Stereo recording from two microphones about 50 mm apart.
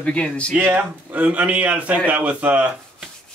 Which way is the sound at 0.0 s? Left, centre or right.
Left.